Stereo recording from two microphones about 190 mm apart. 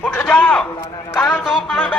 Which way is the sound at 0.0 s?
5° left (ahead or behind).